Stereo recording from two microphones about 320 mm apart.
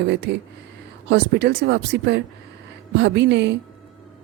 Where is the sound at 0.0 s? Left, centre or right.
Right.